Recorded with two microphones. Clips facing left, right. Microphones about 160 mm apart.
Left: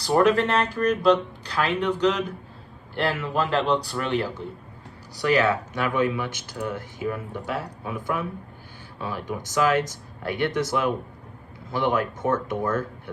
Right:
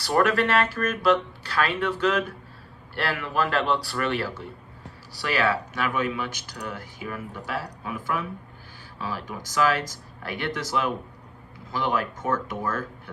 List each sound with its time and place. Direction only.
0.0 s speech: 20° left (ahead or behind)